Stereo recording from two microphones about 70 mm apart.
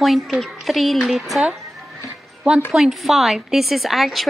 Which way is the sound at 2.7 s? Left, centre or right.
Centre.